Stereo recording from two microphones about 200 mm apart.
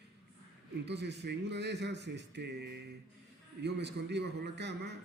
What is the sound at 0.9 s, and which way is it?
Speech, 60° right (ahead or behind).